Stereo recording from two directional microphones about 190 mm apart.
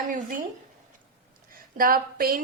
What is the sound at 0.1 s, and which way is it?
Speech, 45° right (ahead or behind).